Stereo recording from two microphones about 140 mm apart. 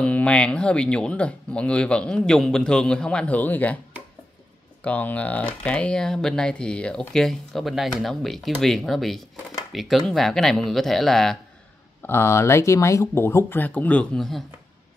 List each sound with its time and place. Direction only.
0.0 s speech: 10° left (ahead or behind)
4.8 s speech: 10° left (ahead or behind)
12.0 s speech: 15° left (ahead or behind)